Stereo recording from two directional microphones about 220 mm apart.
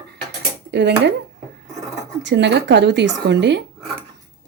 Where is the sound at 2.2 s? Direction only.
55° right (ahead or behind).